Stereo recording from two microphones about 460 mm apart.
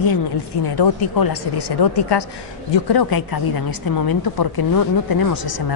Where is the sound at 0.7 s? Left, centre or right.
Left.